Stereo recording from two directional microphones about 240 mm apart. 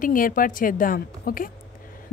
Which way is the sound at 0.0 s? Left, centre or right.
Left.